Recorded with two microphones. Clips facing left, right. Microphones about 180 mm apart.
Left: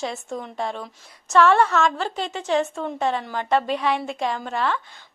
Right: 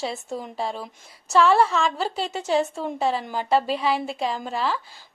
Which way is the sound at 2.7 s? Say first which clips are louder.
Even; 5° right (ahead or behind).